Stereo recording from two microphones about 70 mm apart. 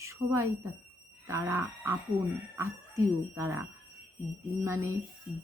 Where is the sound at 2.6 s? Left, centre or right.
Right.